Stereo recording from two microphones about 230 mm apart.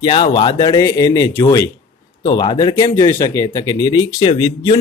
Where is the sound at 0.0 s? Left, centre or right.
Left.